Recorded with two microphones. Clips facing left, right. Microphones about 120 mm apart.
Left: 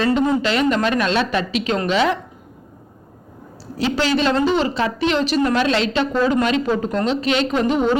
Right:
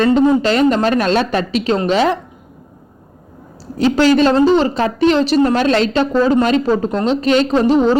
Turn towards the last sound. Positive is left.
turn(degrees=-35)  # may be behind; listen again after turning